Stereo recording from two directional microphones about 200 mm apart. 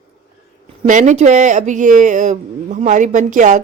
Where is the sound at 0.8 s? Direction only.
35° right (ahead or behind).